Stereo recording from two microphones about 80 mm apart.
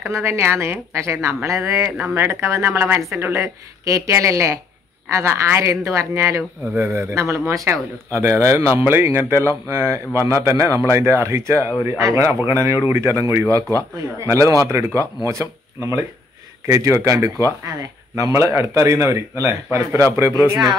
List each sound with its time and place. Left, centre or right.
0.0 s speech: right